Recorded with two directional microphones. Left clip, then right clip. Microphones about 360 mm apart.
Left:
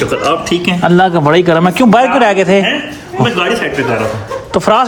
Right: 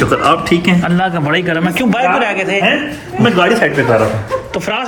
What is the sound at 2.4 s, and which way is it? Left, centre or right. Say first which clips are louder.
Speech: left 5 dB; left.